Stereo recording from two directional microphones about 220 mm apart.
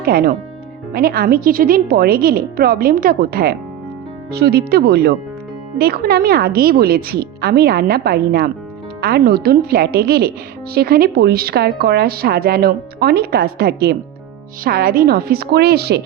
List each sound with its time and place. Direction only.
0.0 s a woman's voice: 45° right (ahead or behind)